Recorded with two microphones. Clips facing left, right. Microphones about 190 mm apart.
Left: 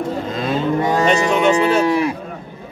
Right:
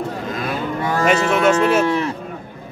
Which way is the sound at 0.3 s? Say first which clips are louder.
Left 6 dB; 25° left (ahead or behind).